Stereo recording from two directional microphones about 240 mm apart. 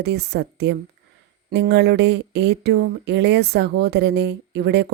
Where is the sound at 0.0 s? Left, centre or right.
Right.